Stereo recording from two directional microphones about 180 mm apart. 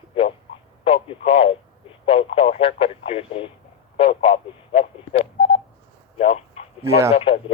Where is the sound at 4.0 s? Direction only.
35° left (ahead or behind).